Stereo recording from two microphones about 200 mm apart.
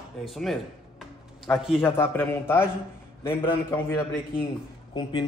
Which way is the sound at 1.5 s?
5° left (ahead or behind).